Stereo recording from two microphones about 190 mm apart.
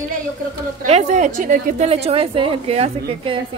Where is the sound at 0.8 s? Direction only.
40° right (ahead or behind).